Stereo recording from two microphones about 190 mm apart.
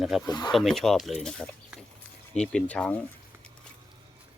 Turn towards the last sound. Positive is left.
turn(degrees=5)  # may be behind; listen again after turning